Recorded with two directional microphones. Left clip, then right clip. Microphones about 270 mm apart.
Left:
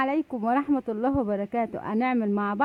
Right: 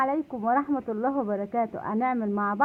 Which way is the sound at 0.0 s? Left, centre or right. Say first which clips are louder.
Even; left.